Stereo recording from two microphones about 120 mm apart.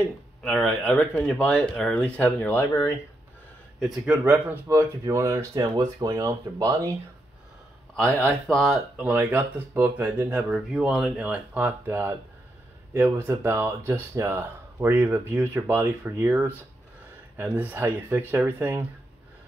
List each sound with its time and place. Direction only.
0.4 s speech: 5° left (ahead or behind)
4.0 s speech: 10° right (ahead or behind)
7.9 s speech: 10° left (ahead or behind)
8.9 s speech: 15° right (ahead or behind)